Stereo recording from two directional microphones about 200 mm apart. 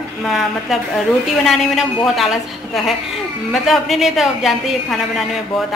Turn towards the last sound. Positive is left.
turn(degrees=0)  # may be behind; listen again after turning